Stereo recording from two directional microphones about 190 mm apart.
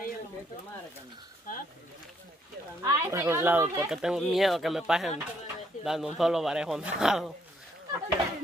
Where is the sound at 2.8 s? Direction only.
15° right (ahead or behind).